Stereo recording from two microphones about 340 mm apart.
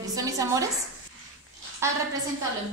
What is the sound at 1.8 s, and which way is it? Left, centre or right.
Speech, centre.